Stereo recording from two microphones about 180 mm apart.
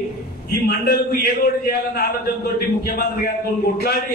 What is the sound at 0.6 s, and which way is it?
A man's voice, 60° left (ahead or behind).